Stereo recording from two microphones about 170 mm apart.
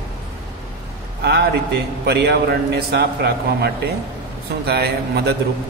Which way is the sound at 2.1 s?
70° right (ahead or behind).